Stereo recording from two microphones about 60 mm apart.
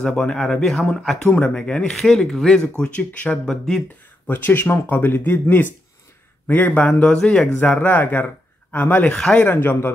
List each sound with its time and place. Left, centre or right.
0.0 s speech: centre
1.3 s speech: left
1.9 s speech: centre
4.3 s speech: left; by 7.4 s centre
7.6 s speech: left